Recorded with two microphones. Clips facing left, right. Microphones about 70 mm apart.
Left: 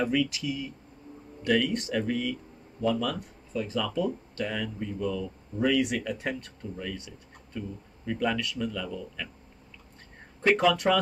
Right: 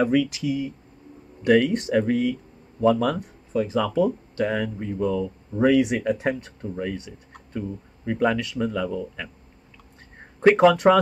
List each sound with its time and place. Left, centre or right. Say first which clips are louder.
0.1 s speech: right 6 dB; right
1.4 s speech: right 7 dB; right
3.6 s speech: right 6 dB; right
4.4 s speech: right 8 dB; right
5.8 s speech: right 7 dB; right
10.4 s speech: right 8 dB; right